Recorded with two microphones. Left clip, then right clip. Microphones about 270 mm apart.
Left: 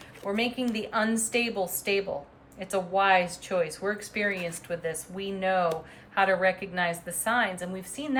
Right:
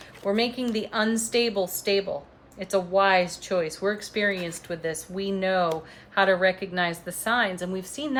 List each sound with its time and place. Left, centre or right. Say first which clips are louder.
0.6 s speech: right 2 dB; centre